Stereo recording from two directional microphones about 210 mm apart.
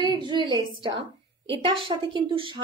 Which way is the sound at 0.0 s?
20° right (ahead or behind).